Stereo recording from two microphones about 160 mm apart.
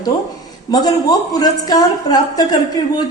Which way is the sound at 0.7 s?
25° left (ahead or behind).